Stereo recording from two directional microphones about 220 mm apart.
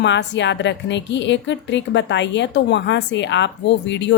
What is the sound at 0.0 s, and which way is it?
A woman's voice, 55° left (ahead or behind).